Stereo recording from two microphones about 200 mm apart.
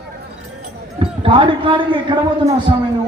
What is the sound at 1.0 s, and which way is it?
A man's voice, 25° right (ahead or behind).